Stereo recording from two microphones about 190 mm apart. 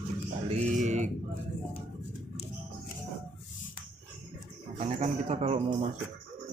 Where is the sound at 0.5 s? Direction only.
35° right (ahead or behind).